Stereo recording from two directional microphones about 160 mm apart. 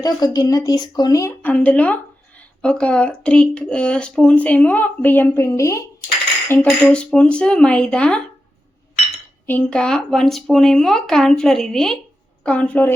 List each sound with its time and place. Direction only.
0.0 s speech: 25° left (ahead or behind); by 8.2 s 5° left (ahead or behind)
9.5 s speech: 10° left (ahead or behind)